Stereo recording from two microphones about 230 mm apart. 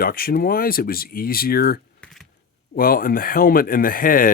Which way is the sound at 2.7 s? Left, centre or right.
Left.